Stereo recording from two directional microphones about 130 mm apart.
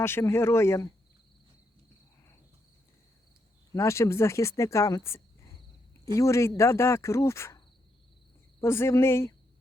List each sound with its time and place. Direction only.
0.0 s speech: 20° left (ahead or behind)
3.8 s speech: 20° left (ahead or behind)
8.6 s speech: 20° left (ahead or behind)